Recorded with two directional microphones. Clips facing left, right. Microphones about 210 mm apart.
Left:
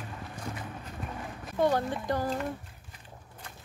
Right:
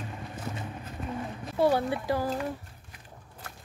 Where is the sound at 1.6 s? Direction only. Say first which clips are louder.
Right 2 dB; 10° right (ahead or behind).